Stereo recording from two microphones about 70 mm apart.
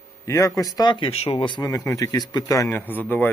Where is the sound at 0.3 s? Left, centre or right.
Left.